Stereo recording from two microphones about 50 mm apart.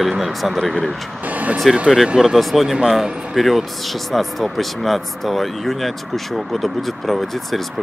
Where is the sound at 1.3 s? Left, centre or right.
Right.